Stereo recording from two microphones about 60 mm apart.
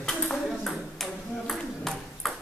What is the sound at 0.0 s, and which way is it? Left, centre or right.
Ping, centre.